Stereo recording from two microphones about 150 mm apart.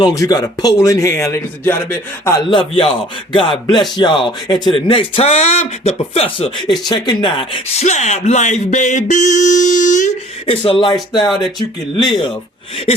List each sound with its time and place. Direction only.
0.0 s speech: 25° left (ahead or behind)
2.5 s speech: 35° left (ahead or behind)
6.6 s speech: centre (ahead or behind)
6.8 s speech: 30° left (ahead or behind)
7.9 s music: 50° left (ahead or behind)
10.4 s speech: 35° left (ahead or behind)
11.9 s speech: 30° left (ahead or behind)